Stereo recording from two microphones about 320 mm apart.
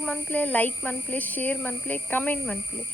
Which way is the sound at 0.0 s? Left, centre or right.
Centre.